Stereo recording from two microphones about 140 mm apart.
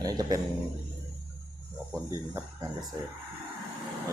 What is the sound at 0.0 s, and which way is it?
Speech, 25° right (ahead or behind).